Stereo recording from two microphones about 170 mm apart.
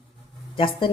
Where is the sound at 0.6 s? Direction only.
30° left (ahead or behind).